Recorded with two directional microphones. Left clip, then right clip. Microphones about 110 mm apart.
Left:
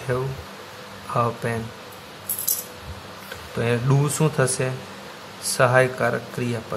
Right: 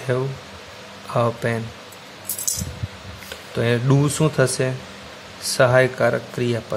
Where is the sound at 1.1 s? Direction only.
40° right (ahead or behind).